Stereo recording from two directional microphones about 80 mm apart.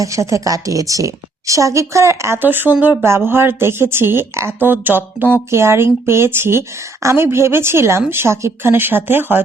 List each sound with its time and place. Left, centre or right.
0.0 s speech: right